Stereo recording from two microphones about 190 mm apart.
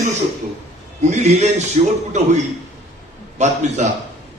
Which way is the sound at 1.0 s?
35° right (ahead or behind).